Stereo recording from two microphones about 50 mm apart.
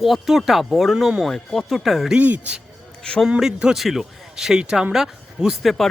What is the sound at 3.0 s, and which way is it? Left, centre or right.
Speech, centre.